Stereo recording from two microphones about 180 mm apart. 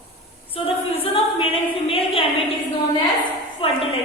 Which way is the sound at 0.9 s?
30° left (ahead or behind).